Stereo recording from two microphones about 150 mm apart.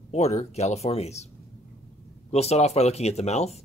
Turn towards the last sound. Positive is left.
turn(degrees=45)  # may be behind; listen again after turning